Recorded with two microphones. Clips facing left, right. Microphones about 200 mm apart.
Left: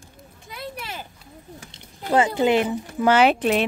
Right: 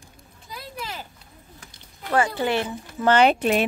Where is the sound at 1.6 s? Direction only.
25° left (ahead or behind).